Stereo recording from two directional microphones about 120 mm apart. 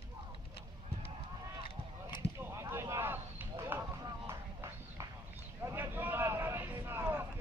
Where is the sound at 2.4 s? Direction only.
20° right (ahead or behind).